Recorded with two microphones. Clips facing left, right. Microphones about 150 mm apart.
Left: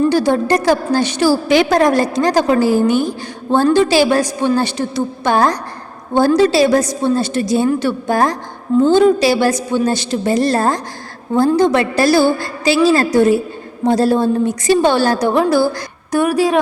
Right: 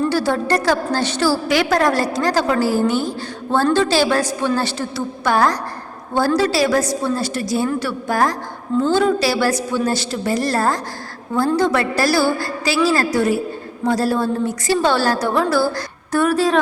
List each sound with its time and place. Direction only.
0.0 s a woman's voice: 20° left (ahead or behind)